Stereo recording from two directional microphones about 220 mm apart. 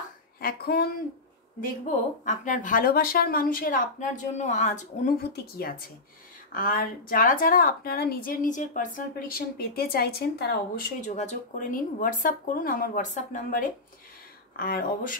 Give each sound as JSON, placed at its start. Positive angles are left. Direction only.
{"t": 0.4, "sound": "speech", "side_deg": 45}
{"t": 2.2, "sound": "a woman's voice", "side_deg": 35}
{"t": 5.2, "sound": "a woman's voice", "side_deg": 45}